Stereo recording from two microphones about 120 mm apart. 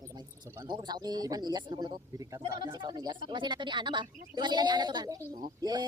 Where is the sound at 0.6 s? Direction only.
35° right (ahead or behind).